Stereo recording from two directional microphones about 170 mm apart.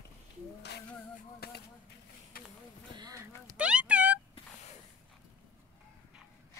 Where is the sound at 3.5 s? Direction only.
5° right (ahead or behind).